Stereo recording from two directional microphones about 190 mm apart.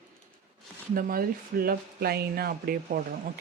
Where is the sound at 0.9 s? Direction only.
50° right (ahead or behind).